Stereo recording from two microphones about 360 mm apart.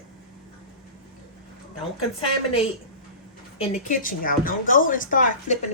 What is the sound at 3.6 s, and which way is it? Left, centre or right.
A woman's voice, centre.